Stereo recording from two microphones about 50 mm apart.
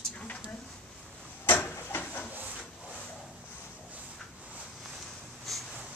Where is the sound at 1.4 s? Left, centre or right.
Left.